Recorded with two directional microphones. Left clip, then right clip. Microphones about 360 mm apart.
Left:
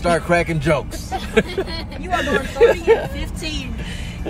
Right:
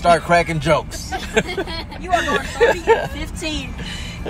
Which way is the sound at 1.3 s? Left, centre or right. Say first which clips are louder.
Left 1 dB; centre.